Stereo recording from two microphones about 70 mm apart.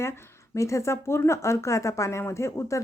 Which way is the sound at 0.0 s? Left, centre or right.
Left.